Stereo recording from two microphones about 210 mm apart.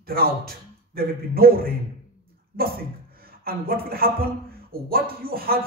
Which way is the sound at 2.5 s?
45° right (ahead or behind).